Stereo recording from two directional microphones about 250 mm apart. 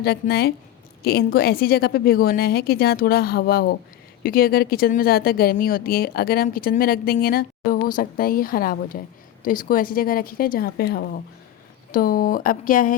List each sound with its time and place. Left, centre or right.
0.0 s a woman's voice: left